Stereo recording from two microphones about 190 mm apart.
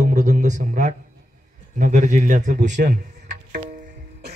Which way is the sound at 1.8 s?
40° right (ahead or behind).